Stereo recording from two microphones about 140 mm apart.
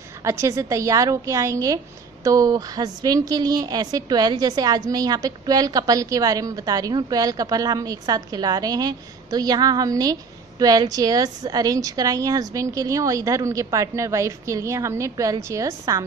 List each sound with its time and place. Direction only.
0.2 s a woman's voice: 20° right (ahead or behind)